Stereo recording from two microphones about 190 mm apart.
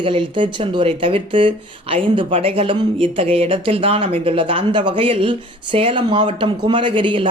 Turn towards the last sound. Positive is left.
turn(degrees=-25)  # may be behind; listen again after turning